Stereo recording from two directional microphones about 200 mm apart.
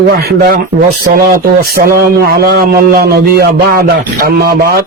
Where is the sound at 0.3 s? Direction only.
50° right (ahead or behind).